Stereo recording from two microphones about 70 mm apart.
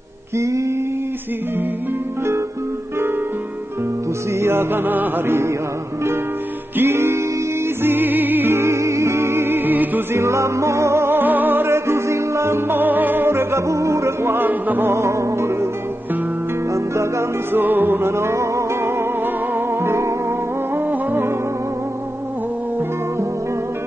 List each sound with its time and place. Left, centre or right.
0.4 s mantra: right
4.3 s chant: right
6.8 s music: right
8.5 s music: right
10.1 s music: right
14.9 s music: right
16.7 s music: right
17.5 s music: right
18.1 s music: right
20.7 s music: right